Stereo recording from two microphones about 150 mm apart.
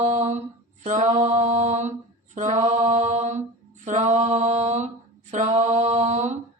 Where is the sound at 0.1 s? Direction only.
50° right (ahead or behind).